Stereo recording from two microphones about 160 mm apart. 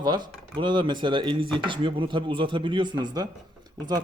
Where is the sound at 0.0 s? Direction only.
30° right (ahead or behind).